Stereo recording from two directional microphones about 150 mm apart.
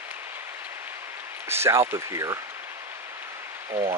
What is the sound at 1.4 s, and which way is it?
Speech, 15° right (ahead or behind).